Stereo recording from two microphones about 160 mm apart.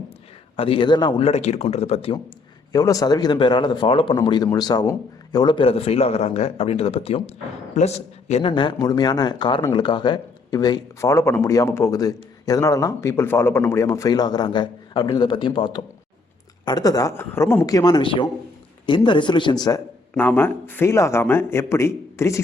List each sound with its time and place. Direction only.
0.5 s speech: 35° left (ahead or behind)
1.2 s speech: 45° left (ahead or behind)
2.7 s a man's voice: 20° left (ahead or behind)
20.1 s a man's voice: 15° left (ahead or behind)